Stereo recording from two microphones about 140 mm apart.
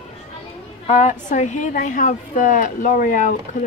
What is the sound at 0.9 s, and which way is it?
A woman's voice, 55° left (ahead or behind).